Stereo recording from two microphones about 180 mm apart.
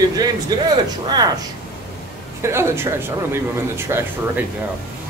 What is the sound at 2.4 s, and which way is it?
Speech, 15° right (ahead or behind).